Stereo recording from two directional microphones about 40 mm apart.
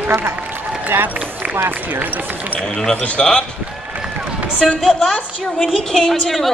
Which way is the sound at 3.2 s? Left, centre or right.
Centre.